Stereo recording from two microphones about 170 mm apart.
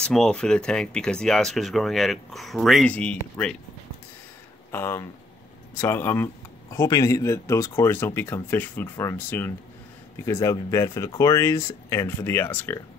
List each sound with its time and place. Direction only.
0.0 s speech: 5° left (ahead or behind)
4.7 s speech: 15° left (ahead or behind)